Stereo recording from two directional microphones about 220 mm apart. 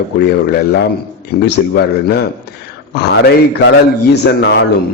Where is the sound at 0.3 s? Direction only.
45° left (ahead or behind).